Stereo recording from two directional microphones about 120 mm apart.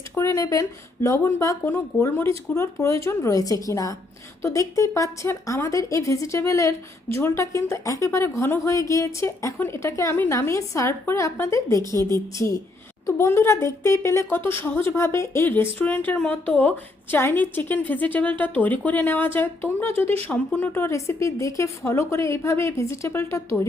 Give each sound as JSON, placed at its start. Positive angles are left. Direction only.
{"t": 0.2, "sound": "a woman's voice", "side_deg": 25}
{"t": 13.1, "sound": "a woman's voice", "side_deg": 25}